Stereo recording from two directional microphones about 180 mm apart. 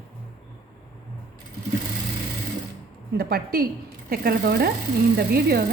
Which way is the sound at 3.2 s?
60° right (ahead or behind).